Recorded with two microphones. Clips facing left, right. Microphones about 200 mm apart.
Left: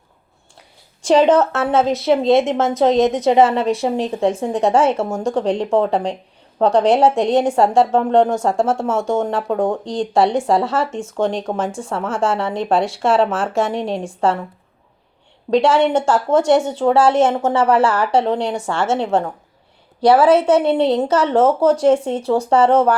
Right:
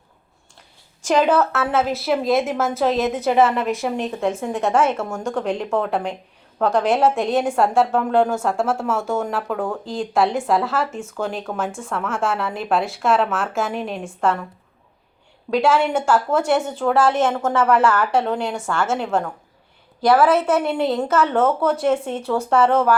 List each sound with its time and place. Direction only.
1.0 s a woman's voice: 30° left (ahead or behind)
15.5 s a woman's voice: 30° left (ahead or behind)